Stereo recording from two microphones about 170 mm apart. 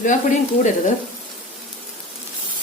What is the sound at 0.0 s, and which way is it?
Speech, 45° left (ahead or behind).